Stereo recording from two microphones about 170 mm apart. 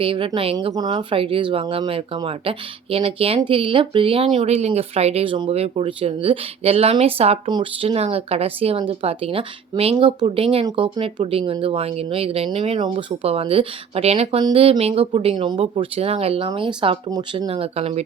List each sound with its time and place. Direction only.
0.0 s speech: 30° right (ahead or behind)
0.5 s speech: 20° right (ahead or behind)